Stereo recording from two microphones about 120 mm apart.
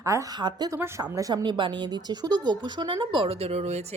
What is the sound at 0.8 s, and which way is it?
Speech, 25° right (ahead or behind).